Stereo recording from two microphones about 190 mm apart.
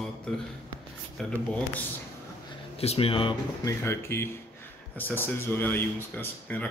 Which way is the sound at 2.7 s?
30° left (ahead or behind).